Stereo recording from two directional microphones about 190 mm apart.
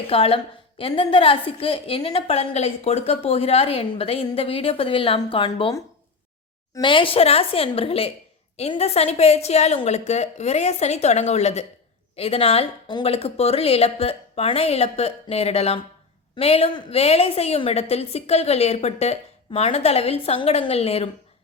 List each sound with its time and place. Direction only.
0.1 s a woman's voice: 30° left (ahead or behind)